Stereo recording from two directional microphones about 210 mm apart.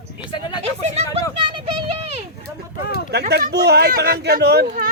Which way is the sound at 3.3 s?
50° right (ahead or behind).